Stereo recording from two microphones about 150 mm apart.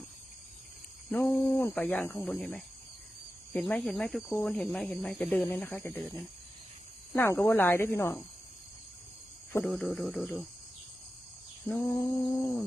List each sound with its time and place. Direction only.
1.1 s speech: 10° left (ahead or behind)
3.5 s insect: 10° left (ahead or behind)
4.4 s speech: 5° left (ahead or behind)
7.2 s speech: 15° left (ahead or behind)
9.6 s insect: 5° left (ahead or behind)
11.7 s speech: 15° left (ahead or behind)